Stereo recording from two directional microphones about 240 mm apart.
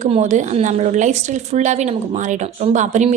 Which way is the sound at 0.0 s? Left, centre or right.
Right.